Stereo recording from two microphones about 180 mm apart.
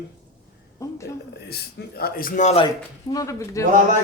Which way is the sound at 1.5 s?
60° left (ahead or behind).